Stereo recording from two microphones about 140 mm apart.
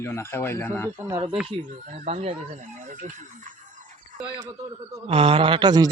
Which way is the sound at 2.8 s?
65° right (ahead or behind).